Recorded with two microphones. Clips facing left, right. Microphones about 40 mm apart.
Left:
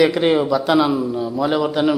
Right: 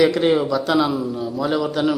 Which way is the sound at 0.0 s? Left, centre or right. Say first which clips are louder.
Left 1 dB; centre.